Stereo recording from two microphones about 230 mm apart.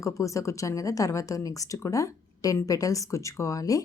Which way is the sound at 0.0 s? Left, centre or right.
Centre.